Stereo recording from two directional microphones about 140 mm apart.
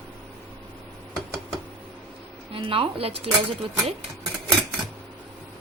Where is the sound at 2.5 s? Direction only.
40° right (ahead or behind).